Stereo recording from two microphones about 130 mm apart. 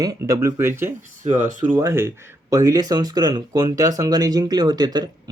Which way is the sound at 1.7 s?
20° right (ahead or behind).